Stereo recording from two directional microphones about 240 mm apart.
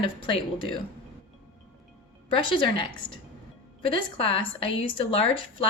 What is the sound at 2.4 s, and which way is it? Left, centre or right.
A woman's voice, left.